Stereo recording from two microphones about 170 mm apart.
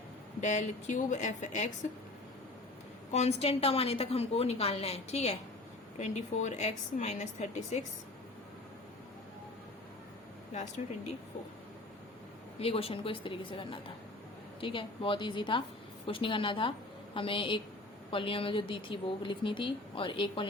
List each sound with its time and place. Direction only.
0.4 s a woman's voice: 45° left (ahead or behind)
3.1 s a woman's voice: 40° left (ahead or behind)
10.5 s a woman's voice: 45° left (ahead or behind)
12.5 s a woman's voice: 35° left (ahead or behind)